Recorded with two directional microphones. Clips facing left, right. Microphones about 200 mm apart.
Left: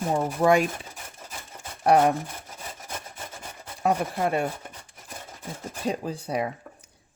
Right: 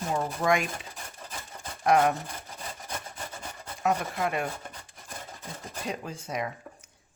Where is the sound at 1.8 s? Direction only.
35° left (ahead or behind).